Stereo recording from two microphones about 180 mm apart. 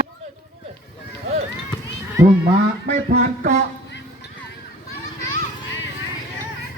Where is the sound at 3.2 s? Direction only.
40° right (ahead or behind).